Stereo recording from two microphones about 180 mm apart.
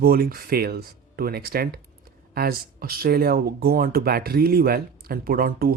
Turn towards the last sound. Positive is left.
turn(degrees=-55)  # may be behind; listen again after turning